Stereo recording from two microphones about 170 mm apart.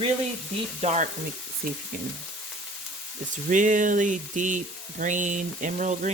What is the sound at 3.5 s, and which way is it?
Speech, 50° right (ahead or behind).